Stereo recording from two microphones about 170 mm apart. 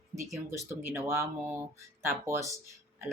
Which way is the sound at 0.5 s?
15° right (ahead or behind).